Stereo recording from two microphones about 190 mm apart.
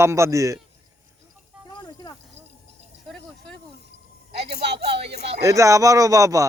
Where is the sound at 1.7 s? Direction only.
20° left (ahead or behind).